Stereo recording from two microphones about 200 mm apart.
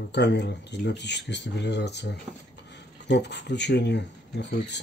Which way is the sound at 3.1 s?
60° left (ahead or behind).